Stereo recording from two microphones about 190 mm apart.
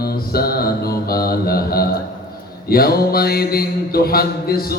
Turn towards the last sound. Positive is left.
turn(degrees=55)  # may be behind; listen again after turning